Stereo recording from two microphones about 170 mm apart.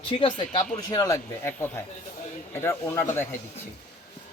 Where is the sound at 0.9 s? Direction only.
20° left (ahead or behind).